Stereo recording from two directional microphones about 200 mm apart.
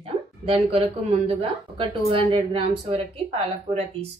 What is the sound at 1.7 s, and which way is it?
Speech, 25° right (ahead or behind).